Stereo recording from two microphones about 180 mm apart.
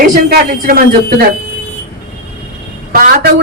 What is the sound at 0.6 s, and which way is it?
Speech, 55° right (ahead or behind).